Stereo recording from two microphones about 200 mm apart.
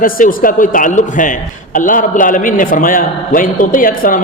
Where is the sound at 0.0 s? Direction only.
45° left (ahead or behind).